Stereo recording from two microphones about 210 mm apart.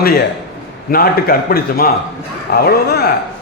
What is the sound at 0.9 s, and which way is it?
A man's voice, 45° left (ahead or behind).